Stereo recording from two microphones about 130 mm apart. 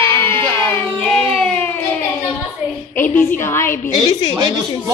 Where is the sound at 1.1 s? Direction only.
5° left (ahead or behind).